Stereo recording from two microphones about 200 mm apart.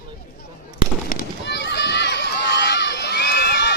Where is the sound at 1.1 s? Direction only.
50° left (ahead or behind).